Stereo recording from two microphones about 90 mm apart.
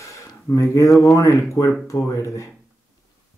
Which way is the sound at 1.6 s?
50° left (ahead or behind).